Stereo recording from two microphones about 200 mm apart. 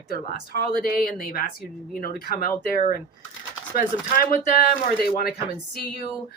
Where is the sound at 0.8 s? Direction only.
45° left (ahead or behind).